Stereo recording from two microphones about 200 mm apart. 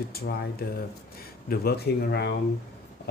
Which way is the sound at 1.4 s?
50° left (ahead or behind).